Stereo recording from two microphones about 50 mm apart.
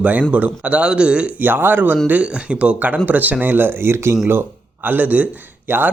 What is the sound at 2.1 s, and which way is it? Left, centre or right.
Speech, right.